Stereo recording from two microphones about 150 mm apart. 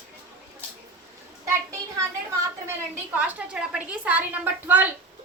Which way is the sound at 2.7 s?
10° right (ahead or behind).